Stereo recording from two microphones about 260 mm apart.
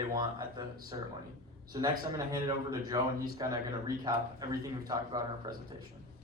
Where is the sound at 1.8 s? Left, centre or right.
Centre.